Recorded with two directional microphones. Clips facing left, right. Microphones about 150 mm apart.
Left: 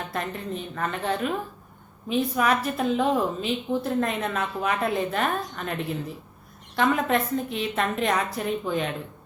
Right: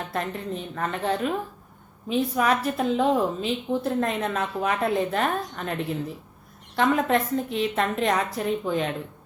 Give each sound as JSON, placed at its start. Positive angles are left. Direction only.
{"t": 0.1, "sound": "a woman's voice", "side_deg": -30}
{"t": 6.7, "sound": "a woman's voice", "side_deg": -30}